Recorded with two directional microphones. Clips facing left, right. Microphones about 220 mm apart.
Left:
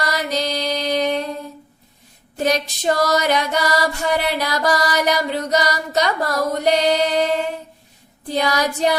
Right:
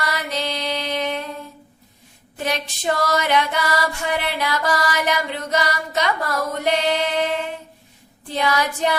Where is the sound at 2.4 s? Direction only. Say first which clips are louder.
Left 5 dB; 40° left (ahead or behind).